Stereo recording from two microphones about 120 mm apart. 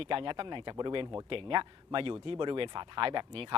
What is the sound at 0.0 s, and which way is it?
A man's voice, 50° right (ahead or behind).